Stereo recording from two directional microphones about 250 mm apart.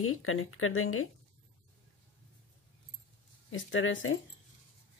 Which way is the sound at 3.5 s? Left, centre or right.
Left.